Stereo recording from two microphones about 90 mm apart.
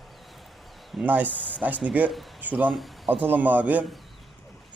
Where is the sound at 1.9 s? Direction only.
15° right (ahead or behind).